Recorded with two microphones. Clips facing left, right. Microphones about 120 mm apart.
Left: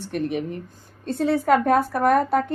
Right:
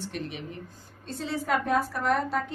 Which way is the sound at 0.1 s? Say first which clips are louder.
Left 10 dB; 55° left (ahead or behind).